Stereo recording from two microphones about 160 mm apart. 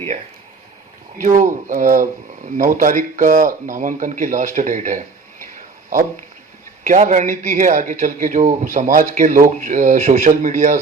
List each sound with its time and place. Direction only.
1.4 s a man's voice: 55° right (ahead or behind)
6.8 s a man's voice: 50° right (ahead or behind)